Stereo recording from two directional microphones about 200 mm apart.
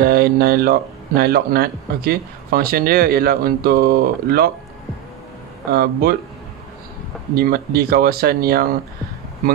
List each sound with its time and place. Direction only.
0.0 s speech: 50° right (ahead or behind)
5.7 s speech: 50° right (ahead or behind)
7.3 s speech: 50° right (ahead or behind)